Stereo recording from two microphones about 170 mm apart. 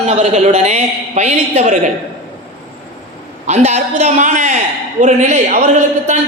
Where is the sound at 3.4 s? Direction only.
40° right (ahead or behind).